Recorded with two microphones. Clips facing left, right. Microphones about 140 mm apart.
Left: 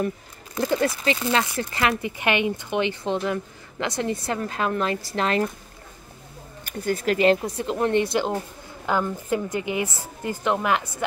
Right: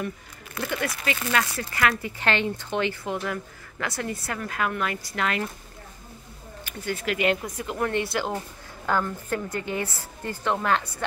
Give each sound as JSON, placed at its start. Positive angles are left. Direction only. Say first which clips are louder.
{"t": 0.6, "sound": "speech", "louder": "left 7 dB", "side_deg": 30}
{"t": 6.6, "sound": "a woman's voice", "louder": "left 5 dB", "side_deg": 40}